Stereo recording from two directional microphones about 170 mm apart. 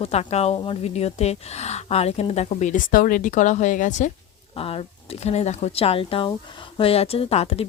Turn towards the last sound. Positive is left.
turn(degrees=35)  # may be behind; listen again after turning